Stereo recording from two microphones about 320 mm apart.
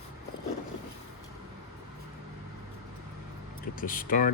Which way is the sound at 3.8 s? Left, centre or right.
Left.